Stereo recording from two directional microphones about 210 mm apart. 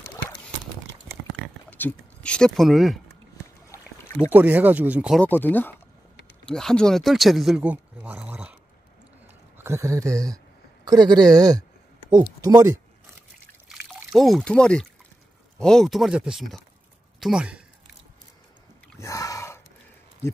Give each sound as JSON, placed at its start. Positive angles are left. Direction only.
{"t": 1.7, "sound": "speech", "side_deg": 10}
{"t": 3.7, "sound": "a sound", "side_deg": 15}
{"t": 4.3, "sound": "speech", "side_deg": -10}
{"t": 5.2, "sound": "speech", "side_deg": 10}
{"t": 9.6, "sound": "speech", "side_deg": -15}
{"t": 13.7, "sound": "trickle", "side_deg": 0}
{"t": 15.5, "sound": "speech", "side_deg": 5}
{"t": 18.9, "sound": "a sound", "side_deg": 15}